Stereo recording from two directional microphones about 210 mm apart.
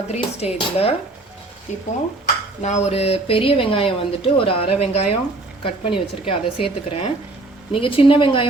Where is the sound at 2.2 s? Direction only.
35° left (ahead or behind).